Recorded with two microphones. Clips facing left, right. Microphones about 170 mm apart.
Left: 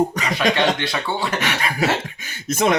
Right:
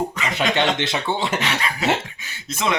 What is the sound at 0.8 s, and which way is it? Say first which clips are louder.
Speech: right 1 dB; 20° right (ahead or behind).